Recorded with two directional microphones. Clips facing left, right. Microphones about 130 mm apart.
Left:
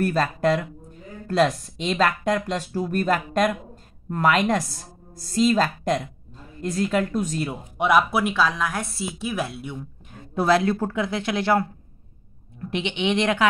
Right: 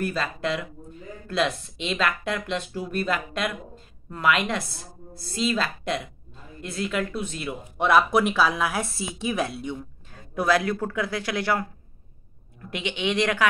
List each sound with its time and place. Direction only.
0.0 s speech: 45° left (ahead or behind)
7.7 s speech: 10° left (ahead or behind)
8.2 s a woman's voice: 5° right (ahead or behind)
10.1 s a woman's voice: 25° left (ahead or behind)
12.7 s a woman's voice: 25° left (ahead or behind)